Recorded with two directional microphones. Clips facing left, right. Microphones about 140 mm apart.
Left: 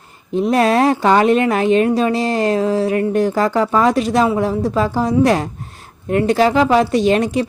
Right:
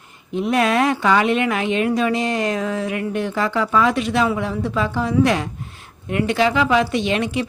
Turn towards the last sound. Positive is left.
turn(degrees=40)  # may be behind; listen again after turning